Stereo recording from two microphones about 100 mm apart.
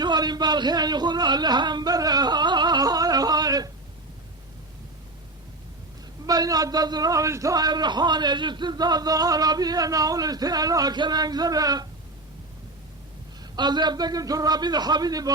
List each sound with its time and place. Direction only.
0.0 s speech: 45° right (ahead or behind)
6.2 s a man's voice: 40° right (ahead or behind)
13.4 s a man's voice: 45° right (ahead or behind)